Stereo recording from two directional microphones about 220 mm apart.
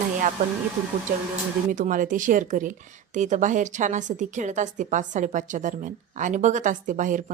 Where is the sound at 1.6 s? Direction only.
35° right (ahead or behind).